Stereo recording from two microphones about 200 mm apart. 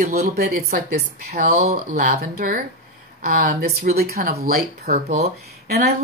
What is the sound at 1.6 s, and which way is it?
Speech, 35° right (ahead or behind).